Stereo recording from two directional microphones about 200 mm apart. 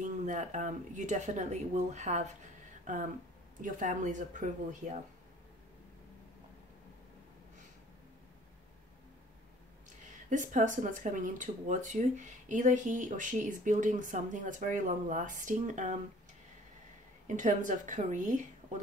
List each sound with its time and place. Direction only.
0.0 s speech: 40° right (ahead or behind)
10.3 s speech: 40° right (ahead or behind)
17.3 s speech: 40° right (ahead or behind)